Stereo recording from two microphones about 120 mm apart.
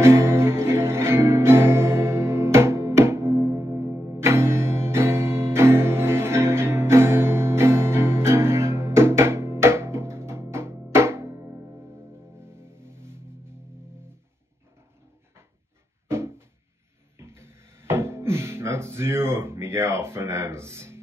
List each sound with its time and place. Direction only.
0.0 s music: 20° right (ahead or behind)
16.1 s a sound: 20° right (ahead or behind)
17.2 s music: 20° right (ahead or behind)